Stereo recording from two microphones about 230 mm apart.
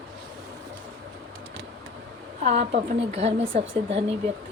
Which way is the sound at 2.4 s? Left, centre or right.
Right.